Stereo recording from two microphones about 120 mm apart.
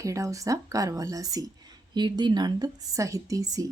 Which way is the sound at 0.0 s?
25° right (ahead or behind).